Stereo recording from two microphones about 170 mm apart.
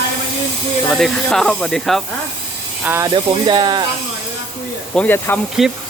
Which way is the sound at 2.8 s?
15° right (ahead or behind).